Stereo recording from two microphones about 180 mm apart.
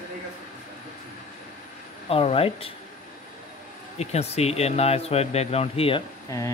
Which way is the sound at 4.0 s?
35° left (ahead or behind).